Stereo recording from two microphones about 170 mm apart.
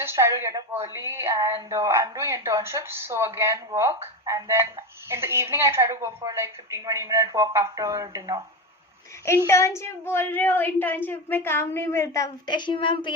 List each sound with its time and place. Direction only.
0.0 s a woman's voice: 15° right (ahead or behind)
9.5 s speech: 15° left (ahead or behind)